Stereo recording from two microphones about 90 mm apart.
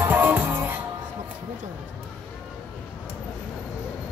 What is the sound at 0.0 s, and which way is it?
Music, 20° right (ahead or behind).